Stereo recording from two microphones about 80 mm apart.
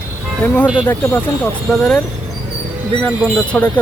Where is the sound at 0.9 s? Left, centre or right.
Left.